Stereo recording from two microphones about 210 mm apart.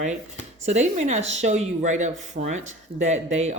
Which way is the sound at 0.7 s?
35° right (ahead or behind).